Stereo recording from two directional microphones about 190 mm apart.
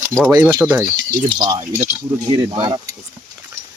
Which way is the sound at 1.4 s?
20° right (ahead or behind).